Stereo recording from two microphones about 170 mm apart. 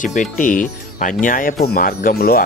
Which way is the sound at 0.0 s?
50° left (ahead or behind).